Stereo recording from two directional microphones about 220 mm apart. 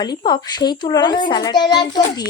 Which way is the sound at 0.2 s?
20° left (ahead or behind).